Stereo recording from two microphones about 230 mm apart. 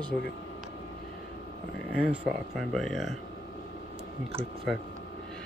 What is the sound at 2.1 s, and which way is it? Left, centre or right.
Speech, centre.